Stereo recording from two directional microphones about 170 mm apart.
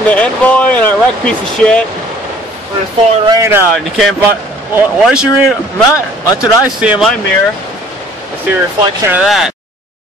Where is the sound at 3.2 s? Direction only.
15° right (ahead or behind).